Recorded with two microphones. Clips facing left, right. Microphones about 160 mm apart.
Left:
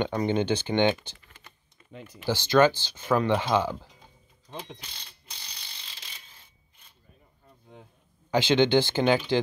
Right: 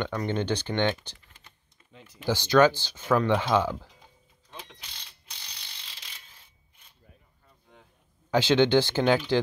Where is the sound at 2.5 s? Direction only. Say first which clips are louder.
Even; 5° left (ahead or behind).